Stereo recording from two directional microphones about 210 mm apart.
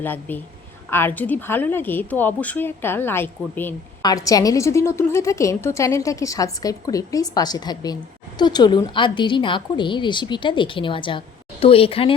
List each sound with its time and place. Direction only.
0.0 s a woman's voice: 10° left (ahead or behind); by 12.1 s 25° left (ahead or behind)